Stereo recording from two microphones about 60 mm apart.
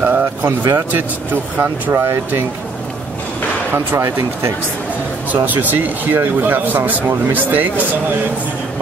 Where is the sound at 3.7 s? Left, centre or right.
Right.